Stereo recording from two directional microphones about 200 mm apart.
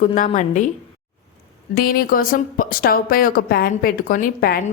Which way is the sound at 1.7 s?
45° left (ahead or behind).